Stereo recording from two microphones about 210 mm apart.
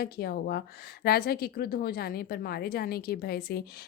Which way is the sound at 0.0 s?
45° left (ahead or behind).